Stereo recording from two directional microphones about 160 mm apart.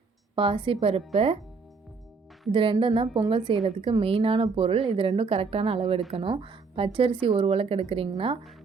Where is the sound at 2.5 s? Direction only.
35° right (ahead or behind).